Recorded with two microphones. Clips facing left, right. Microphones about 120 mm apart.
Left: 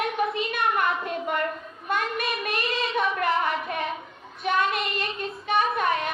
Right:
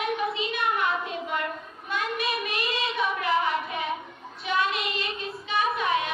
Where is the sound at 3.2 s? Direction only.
50° left (ahead or behind).